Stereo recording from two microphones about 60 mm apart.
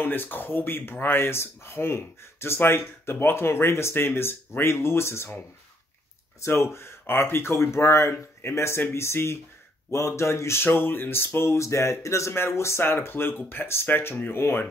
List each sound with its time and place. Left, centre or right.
0.0 s speech: left
6.4 s speech: left